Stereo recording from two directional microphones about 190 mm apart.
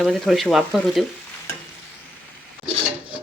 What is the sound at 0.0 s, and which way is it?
Speech, centre (ahead or behind).